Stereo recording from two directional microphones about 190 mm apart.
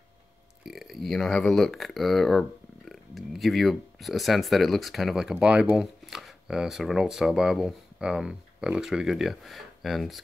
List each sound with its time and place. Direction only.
0.7 s speech: centre (ahead or behind)